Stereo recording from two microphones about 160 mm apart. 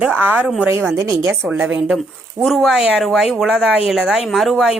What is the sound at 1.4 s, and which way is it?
A woman's voice, 10° right (ahead or behind).